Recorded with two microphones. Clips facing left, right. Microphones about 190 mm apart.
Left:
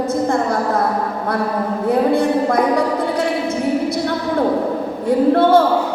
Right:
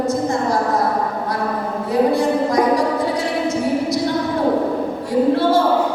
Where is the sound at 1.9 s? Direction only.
55° left (ahead or behind).